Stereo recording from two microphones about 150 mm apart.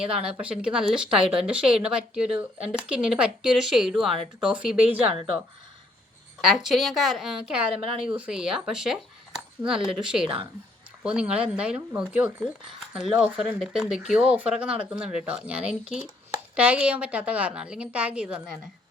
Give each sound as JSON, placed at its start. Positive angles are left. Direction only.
{"t": 0.0, "sound": "speech", "side_deg": -5}
{"t": 6.4, "sound": "a woman's voice", "side_deg": 0}